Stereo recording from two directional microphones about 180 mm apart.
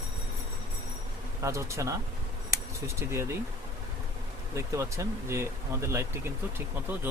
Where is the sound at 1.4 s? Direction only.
15° right (ahead or behind).